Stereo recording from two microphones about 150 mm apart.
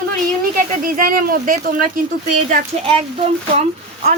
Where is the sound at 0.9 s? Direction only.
70° right (ahead or behind).